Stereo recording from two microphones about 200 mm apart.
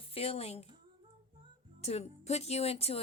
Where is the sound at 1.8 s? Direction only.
35° left (ahead or behind).